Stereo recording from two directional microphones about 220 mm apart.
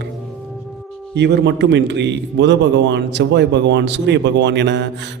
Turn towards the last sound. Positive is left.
turn(degrees=-50)  # may be behind; listen again after turning